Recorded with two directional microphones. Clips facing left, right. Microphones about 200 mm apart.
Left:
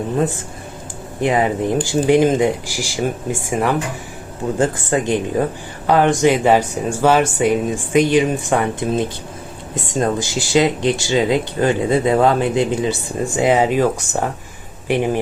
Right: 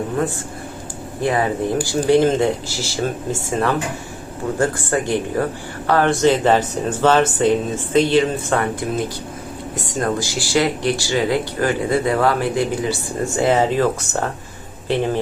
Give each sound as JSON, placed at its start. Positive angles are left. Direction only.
{"t": 1.2, "sound": "speech", "side_deg": 15}